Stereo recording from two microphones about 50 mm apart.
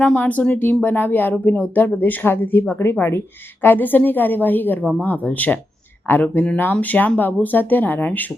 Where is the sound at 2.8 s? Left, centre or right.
Left.